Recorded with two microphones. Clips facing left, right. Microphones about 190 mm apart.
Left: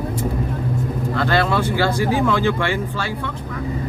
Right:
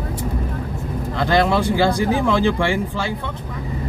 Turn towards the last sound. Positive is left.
turn(degrees=-15)  # may be behind; listen again after turning